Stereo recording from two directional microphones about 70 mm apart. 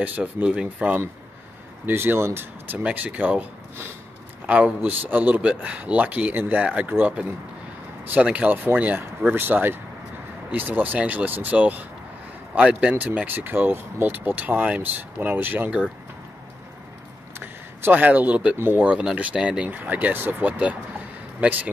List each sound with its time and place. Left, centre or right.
0.0 s speech: centre
1.9 s speech: right
2.8 s speech: right
4.5 s speech: right
17.4 s speech: right
18.6 s speech: right
18.9 s speech: centre
19.6 s speech: right